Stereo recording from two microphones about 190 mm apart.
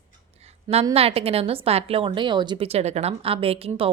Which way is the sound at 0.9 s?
30° right (ahead or behind).